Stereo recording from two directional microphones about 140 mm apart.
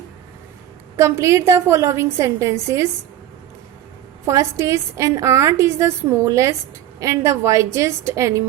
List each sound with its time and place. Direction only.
0.9 s a woman's voice: 20° right (ahead or behind)
4.3 s a woman's voice: 20° right (ahead or behind)